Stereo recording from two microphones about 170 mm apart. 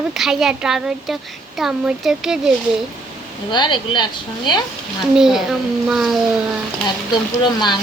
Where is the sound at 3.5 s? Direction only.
25° left (ahead or behind).